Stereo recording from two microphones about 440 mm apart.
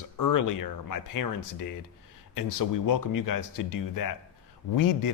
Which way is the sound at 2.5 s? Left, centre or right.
Left.